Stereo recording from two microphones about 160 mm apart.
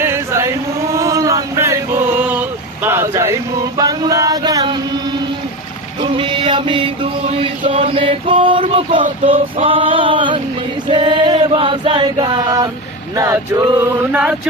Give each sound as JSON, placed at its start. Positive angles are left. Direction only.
{"t": 0.0, "sound": "chant", "side_deg": -15}
{"t": 3.8, "sound": "a sound", "side_deg": -25}
{"t": 6.0, "sound": "chant", "side_deg": -30}
{"t": 7.7, "sound": "a sound", "side_deg": -35}
{"t": 9.2, "sound": "male singing", "side_deg": -35}
{"t": 10.8, "sound": "chant", "side_deg": -30}
{"t": 13.1, "sound": "male singing", "side_deg": -20}